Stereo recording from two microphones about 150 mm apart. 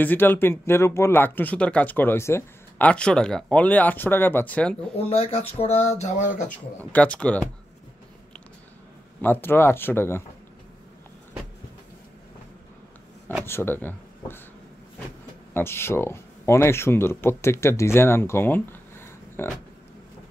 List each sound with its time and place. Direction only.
0.0 s speech: 15° left (ahead or behind)
4.9 s speech: 40° left (ahead or behind); by 6.5 s 55° left (ahead or behind)
6.8 s speech: 10° left (ahead or behind)
9.2 s speech: 15° left (ahead or behind)
13.4 s speech: 15° left (ahead or behind)
15.5 s speech: 15° left (ahead or behind)